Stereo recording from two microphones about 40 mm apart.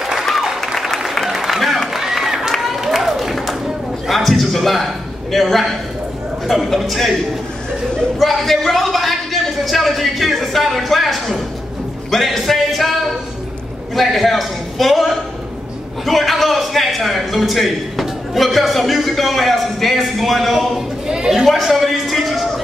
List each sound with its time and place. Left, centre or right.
0.2 s applause: centre
2.5 s a sound: centre
6.4 s a man's voice: centre
8.2 s a man's voice: centre
13.9 s a man's voice: centre
21.6 s a sound: centre